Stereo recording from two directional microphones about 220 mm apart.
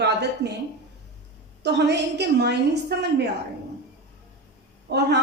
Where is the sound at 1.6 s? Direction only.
50° right (ahead or behind).